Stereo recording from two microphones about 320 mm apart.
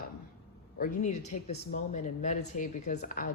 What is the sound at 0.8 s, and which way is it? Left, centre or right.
Speech, left.